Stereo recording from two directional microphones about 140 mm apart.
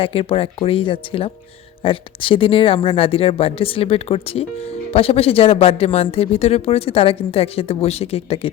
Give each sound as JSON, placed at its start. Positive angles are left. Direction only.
{"t": 0.0, "sound": "speech", "side_deg": 40}